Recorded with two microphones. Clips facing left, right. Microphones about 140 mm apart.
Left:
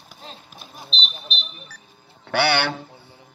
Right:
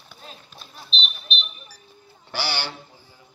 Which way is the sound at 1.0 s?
40° left (ahead or behind).